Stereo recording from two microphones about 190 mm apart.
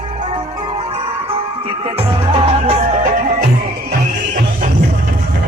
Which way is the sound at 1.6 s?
25° right (ahead or behind).